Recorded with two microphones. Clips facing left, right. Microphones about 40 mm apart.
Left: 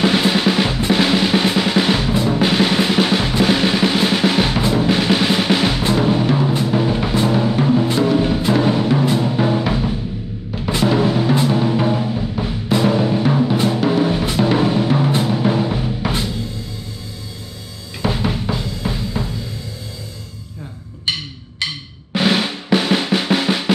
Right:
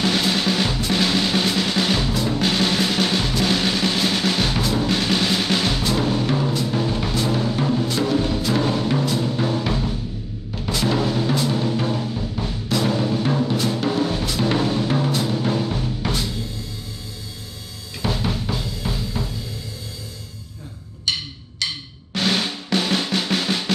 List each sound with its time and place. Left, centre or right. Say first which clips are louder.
0.0 s drum: left 5 dB; centre
8.5 s music: left 5 dB; centre
13.7 s drum: left 5 dB; centre
18.0 s drum: left 4 dB; centre
22.1 s drum: left 5 dB; centre